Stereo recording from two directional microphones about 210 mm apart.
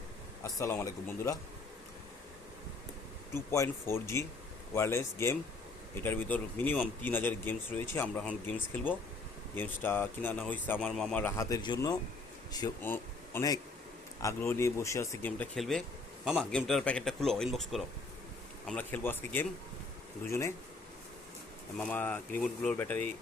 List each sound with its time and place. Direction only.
0.4 s speech: 15° left (ahead or behind)
3.5 s speech: 15° left (ahead or behind)
21.8 s speech: 5° left (ahead or behind)